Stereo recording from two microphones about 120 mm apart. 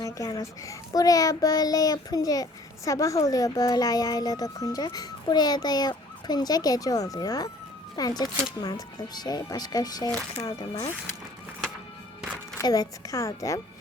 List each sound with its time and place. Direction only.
0.0 s a child's voice: 30° left (ahead or behind)
9.1 s a child's voice: 35° left (ahead or behind)
12.5 s speech: 35° left (ahead or behind)